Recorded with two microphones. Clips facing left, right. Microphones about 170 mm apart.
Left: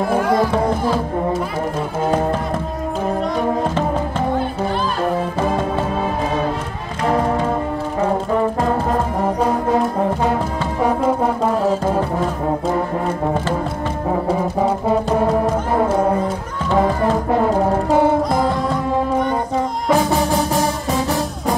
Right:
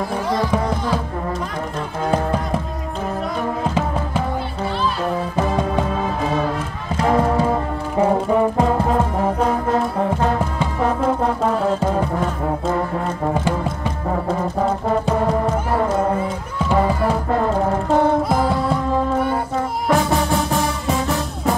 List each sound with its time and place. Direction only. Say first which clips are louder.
0.0 s music: left 5 dB; 55° left (ahead or behind)
10.8 s music: left 2 dB; 10° left (ahead or behind)
14.2 s music: left 1 dB; 5° left (ahead or behind)
17.8 s music: even; 10° left (ahead or behind)
18.3 s music: left 1 dB; 5° right (ahead or behind)
19.9 s music: left 1 dB; centre (ahead or behind)